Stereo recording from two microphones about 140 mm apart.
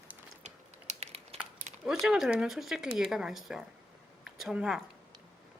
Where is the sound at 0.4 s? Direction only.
50° right (ahead or behind).